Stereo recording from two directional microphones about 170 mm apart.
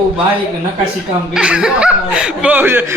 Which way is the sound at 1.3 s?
5° right (ahead or behind).